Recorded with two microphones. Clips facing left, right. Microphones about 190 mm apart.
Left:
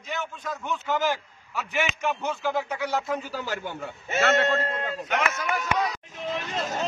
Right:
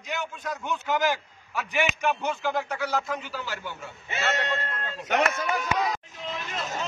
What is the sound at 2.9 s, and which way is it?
Speech, 25° left (ahead or behind).